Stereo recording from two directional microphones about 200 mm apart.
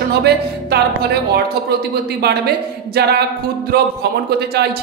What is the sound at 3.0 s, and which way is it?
Speech, 55° right (ahead or behind).